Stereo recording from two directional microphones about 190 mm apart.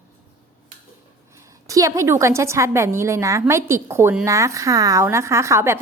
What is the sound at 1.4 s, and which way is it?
A woman's voice, 15° right (ahead or behind).